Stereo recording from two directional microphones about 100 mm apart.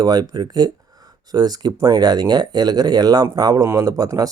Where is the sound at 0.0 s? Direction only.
45° right (ahead or behind).